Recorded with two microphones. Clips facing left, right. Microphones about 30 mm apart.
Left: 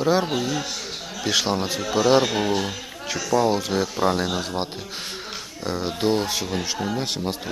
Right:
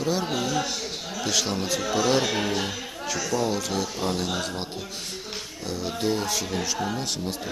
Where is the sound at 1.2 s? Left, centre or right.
Left; by 2.7 s centre.